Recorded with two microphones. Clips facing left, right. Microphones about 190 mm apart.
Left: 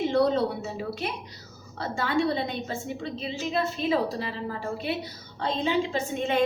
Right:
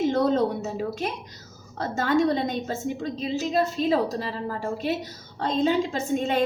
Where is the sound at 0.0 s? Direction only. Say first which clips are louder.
Right 1 dB; 45° right (ahead or behind).